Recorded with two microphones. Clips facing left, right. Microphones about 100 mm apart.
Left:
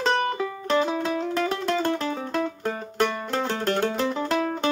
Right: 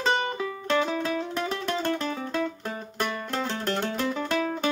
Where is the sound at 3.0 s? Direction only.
Centre (ahead or behind).